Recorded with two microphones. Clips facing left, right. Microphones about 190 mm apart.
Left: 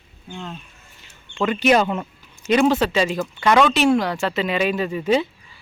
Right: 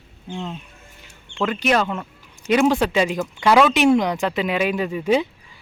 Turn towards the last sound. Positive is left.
turn(degrees=-10)  # may be behind; listen again after turning